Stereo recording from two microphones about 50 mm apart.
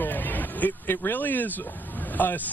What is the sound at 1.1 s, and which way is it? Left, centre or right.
Speech, left.